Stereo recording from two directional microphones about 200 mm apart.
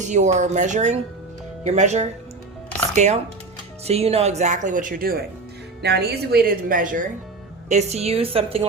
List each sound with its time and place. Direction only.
0.0 s a woman's voice: 35° right (ahead or behind)